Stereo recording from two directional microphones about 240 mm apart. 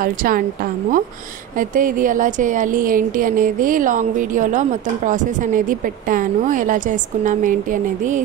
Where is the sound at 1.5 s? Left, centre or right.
Right.